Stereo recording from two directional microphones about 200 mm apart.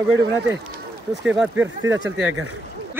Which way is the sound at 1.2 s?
5° right (ahead or behind).